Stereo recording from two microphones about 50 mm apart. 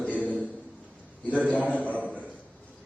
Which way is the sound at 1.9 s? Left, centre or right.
Left.